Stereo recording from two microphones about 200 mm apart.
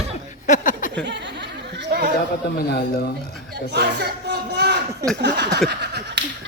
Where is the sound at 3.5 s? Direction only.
55° right (ahead or behind).